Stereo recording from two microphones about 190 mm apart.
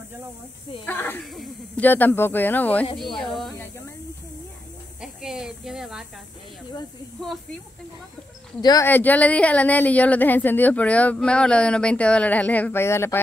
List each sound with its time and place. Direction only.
0.8 s a woman's voice: 10° left (ahead or behind)
1.3 s a woman's voice: centre (ahead or behind)
5.0 s speech: centre (ahead or behind)
8.5 s speech: 20° left (ahead or behind)
8.8 s a woman's voice: 10° left (ahead or behind)